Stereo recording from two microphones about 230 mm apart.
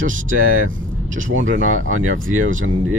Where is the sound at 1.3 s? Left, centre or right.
Right.